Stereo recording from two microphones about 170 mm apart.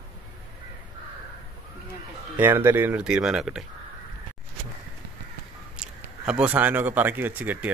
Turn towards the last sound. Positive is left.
turn(degrees=-10)  # may be behind; listen again after turning